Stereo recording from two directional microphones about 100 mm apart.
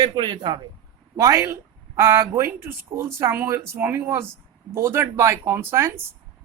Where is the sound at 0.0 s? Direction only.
45° right (ahead or behind).